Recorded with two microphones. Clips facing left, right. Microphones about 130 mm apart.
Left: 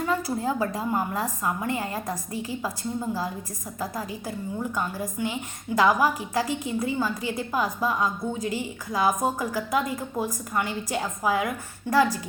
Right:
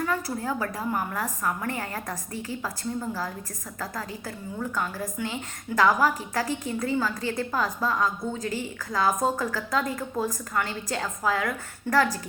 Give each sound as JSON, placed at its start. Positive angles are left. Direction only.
{"t": 0.0, "sound": "a woman's voice", "side_deg": 20}